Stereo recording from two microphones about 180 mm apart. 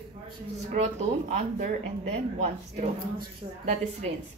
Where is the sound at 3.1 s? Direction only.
40° right (ahead or behind).